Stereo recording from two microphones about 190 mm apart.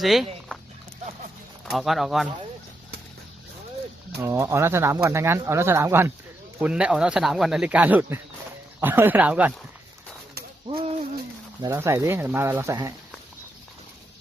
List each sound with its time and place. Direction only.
0.0 s speech: centre (ahead or behind)
1.7 s speech: centre (ahead or behind)
4.2 s speech: 15° right (ahead or behind)
10.7 s hoot: 25° right (ahead or behind)
11.6 s speech: 15° right (ahead or behind)